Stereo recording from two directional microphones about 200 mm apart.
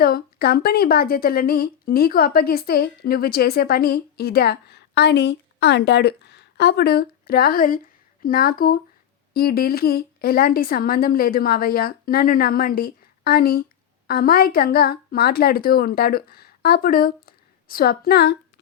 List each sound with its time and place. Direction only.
0.0 s a woman's voice: 50° left (ahead or behind)